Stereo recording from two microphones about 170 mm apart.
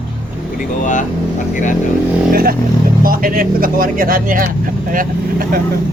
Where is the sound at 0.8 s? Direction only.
50° left (ahead or behind).